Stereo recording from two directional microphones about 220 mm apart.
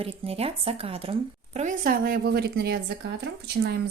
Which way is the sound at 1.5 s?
35° right (ahead or behind).